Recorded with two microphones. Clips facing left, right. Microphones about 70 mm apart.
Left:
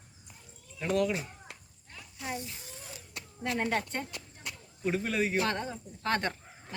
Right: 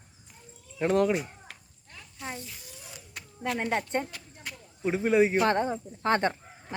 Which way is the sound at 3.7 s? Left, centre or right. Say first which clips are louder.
Right 4 dB; right.